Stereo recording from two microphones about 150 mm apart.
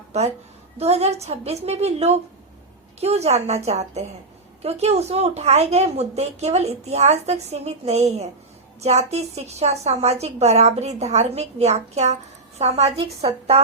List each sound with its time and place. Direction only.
0.1 s a woman's voice: 45° right (ahead or behind)